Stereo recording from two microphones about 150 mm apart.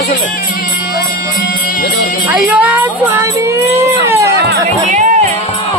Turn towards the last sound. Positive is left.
turn(degrees=-55)  # may be behind; listen again after turning